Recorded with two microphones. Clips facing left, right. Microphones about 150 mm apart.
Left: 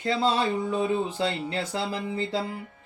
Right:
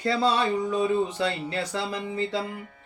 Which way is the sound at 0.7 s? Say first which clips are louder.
Right 2 dB; 25° left (ahead or behind).